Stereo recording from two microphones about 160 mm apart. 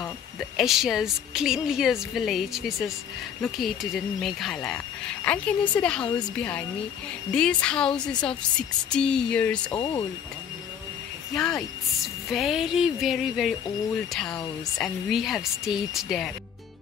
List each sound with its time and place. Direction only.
0.0 s a woman's voice: centre (ahead or behind)
9.7 s speech: 25° left (ahead or behind)
11.3 s a woman's voice: 5° left (ahead or behind)